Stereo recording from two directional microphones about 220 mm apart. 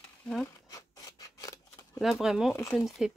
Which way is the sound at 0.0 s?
5° left (ahead or behind).